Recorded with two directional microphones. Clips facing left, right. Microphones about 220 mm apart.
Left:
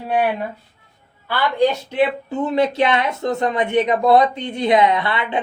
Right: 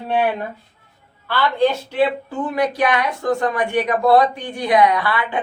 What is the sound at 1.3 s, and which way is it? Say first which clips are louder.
Speech: even; 15° left (ahead or behind).